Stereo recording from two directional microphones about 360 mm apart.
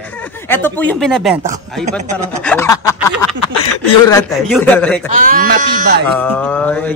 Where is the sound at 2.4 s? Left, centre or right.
Centre.